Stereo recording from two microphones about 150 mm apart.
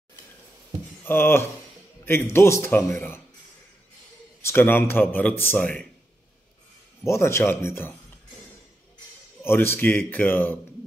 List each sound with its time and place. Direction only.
1.0 s speech: 15° left (ahead or behind)
4.4 s speech: 15° left (ahead or behind)
7.0 s speech: 15° left (ahead or behind)
9.4 s speech: 15° left (ahead or behind)